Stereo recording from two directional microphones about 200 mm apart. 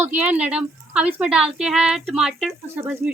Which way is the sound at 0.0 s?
10° right (ahead or behind).